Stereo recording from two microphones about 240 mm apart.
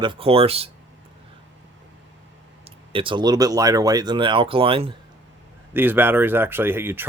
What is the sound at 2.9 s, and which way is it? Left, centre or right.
Speech, right.